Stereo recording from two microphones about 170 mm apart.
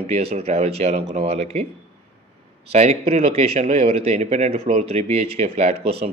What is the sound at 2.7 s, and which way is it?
Speech, 40° right (ahead or behind).